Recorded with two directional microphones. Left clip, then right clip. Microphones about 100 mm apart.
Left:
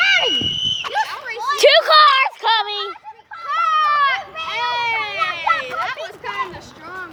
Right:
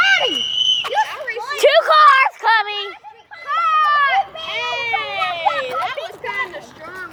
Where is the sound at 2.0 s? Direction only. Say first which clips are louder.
Right 3 dB; 15° left (ahead or behind).